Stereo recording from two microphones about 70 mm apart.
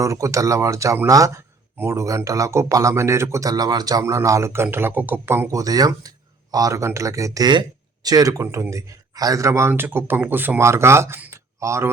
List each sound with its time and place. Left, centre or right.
0.0 s speech: right
3.5 s a man's voice: right
4.0 s speech: right
4.6 s speech: right
5.5 s speech: right
8.0 s speech: right
10.6 s speech: right
11.3 s a sound: right